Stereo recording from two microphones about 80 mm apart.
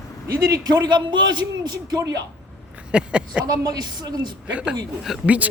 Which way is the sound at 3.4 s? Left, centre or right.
Right.